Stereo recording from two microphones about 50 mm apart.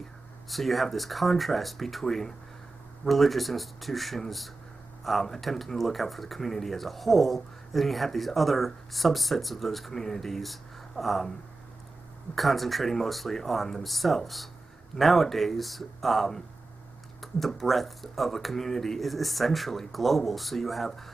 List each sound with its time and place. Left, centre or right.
0.5 s speech: centre
12.4 s speech: centre